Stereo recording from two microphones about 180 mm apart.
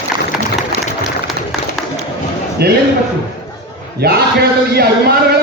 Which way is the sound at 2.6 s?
60° right (ahead or behind).